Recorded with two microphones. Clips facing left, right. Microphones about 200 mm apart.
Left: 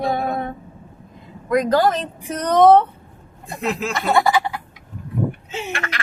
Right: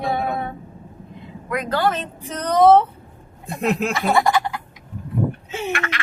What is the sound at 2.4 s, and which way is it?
Speech, 5° right (ahead or behind).